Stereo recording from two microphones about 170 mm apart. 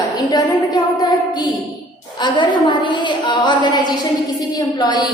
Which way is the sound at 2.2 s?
30° left (ahead or behind).